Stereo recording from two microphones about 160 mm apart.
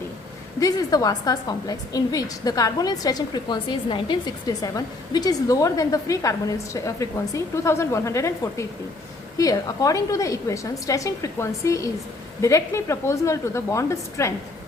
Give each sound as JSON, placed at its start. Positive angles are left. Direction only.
{"t": 0.6, "sound": "a woman's voice", "side_deg": 20}